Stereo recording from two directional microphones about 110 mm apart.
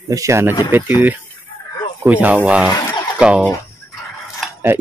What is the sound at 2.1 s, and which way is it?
Speech, 15° right (ahead or behind).